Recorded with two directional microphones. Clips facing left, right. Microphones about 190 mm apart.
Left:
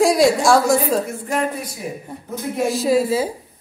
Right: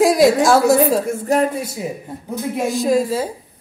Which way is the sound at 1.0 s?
40° right (ahead or behind).